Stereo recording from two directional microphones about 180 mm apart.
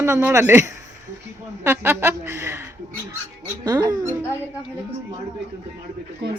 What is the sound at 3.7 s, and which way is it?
Speech, 20° right (ahead or behind).